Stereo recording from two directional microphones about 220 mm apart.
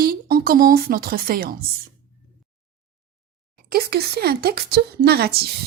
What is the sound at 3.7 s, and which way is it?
A woman's voice, 45° right (ahead or behind).